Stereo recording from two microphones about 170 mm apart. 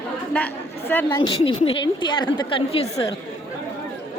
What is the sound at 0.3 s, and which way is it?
Speech, 10° left (ahead or behind).